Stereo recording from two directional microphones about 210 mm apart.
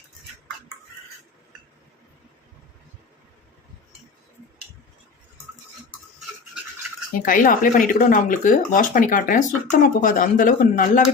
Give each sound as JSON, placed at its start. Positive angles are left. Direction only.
{"t": 7.1, "sound": "speech", "side_deg": 40}